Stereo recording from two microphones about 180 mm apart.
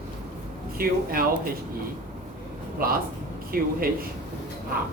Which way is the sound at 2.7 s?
55° right (ahead or behind).